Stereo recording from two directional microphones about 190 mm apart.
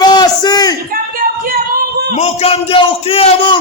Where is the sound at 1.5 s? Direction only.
55° right (ahead or behind).